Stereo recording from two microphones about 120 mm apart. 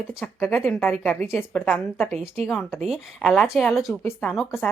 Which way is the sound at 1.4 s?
15° left (ahead or behind).